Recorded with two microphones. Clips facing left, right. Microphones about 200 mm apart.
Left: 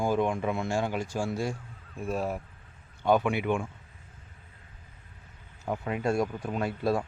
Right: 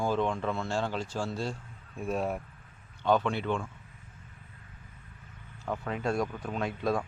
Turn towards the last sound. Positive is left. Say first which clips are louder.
# left 2 dB
turn(degrees=5)  # may be behind; listen again after turning